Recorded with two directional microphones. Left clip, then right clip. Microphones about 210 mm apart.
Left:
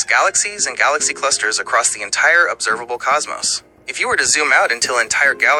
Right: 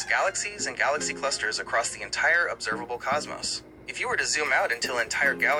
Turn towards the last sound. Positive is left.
turn(degrees=45)  # may be behind; listen again after turning